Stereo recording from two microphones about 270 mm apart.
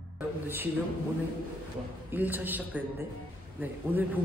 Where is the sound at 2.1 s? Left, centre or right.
Centre.